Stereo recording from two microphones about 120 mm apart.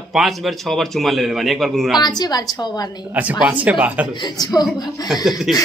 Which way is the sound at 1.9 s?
35° left (ahead or behind).